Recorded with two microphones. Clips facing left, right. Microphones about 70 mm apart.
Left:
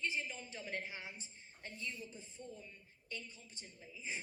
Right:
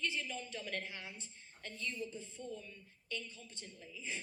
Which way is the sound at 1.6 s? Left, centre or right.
Left.